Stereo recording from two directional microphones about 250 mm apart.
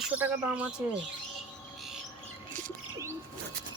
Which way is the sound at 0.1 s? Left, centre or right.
Centre.